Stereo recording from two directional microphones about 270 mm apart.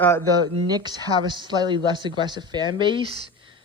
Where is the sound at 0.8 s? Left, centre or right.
Centre.